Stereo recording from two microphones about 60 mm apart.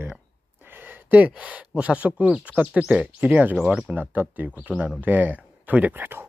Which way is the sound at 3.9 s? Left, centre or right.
Right.